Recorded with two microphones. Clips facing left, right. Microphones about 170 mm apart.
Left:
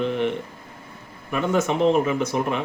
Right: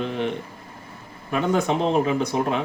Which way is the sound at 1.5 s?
15° right (ahead or behind).